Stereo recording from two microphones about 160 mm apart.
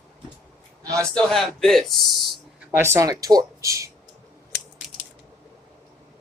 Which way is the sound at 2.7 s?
15° right (ahead or behind).